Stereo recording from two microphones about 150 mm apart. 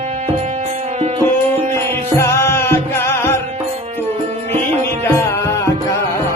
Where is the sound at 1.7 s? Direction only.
15° left (ahead or behind).